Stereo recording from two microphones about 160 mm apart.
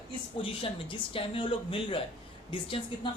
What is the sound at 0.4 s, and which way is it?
A woman's voice, 35° left (ahead or behind).